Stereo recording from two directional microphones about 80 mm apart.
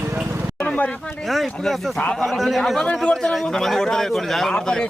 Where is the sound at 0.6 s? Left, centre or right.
Centre.